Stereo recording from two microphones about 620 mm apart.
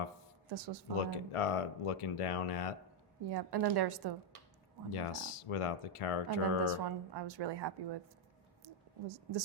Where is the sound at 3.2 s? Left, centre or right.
Right.